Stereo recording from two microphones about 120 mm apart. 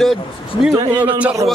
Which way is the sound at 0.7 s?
35° right (ahead or behind).